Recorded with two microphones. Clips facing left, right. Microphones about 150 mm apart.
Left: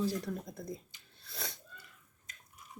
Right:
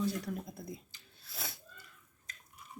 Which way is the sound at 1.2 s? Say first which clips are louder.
Left 1 dB; 5° right (ahead or behind).